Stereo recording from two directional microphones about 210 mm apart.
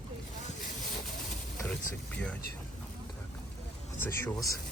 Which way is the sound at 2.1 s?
5° left (ahead or behind).